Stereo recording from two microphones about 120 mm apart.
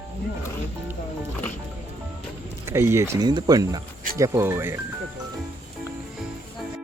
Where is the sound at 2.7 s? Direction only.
20° right (ahead or behind).